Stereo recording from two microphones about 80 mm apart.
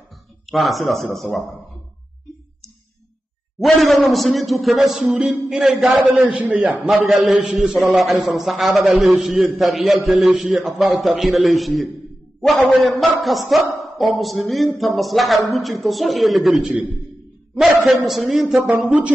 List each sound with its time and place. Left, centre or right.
0.5 s a man's voice: centre
3.5 s a man's voice: centre
6.2 s a man's voice: centre
6.8 s a sound: centre
7.2 s a man's voice: centre
18.6 s a sound: centre